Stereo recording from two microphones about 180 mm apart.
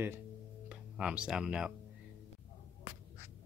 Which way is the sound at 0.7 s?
5° right (ahead or behind).